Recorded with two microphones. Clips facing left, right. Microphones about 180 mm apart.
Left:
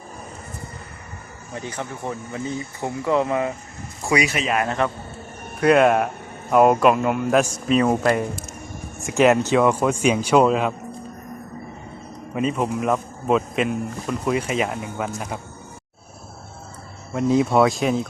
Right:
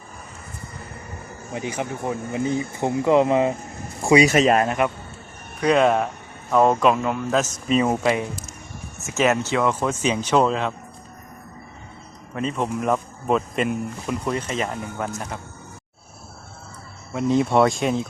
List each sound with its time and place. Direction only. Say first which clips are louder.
1.5 s speech: right 3 dB; 15° right (ahead or behind)
4.3 s speech: right 6 dB; 40° right (ahead or behind)
5.5 s a man's voice: left 2 dB; 5° left (ahead or behind)
7.7 s a man's voice: left 1 dB; centre (ahead or behind)
9.0 s speech: left 4 dB; 15° left (ahead or behind)
12.3 s a man's voice: left 2 dB; 10° left (ahead or behind)
17.2 s a man's voice: left 1 dB; centre (ahead or behind)